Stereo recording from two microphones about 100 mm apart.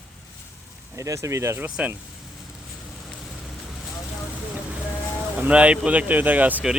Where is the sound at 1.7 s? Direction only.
10° right (ahead or behind).